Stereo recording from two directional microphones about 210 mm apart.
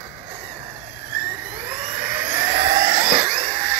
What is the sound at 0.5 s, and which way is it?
Vehicle, 15° right (ahead or behind).